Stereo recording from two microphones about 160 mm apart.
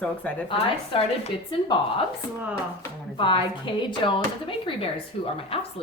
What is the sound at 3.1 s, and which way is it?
Speech, 30° left (ahead or behind).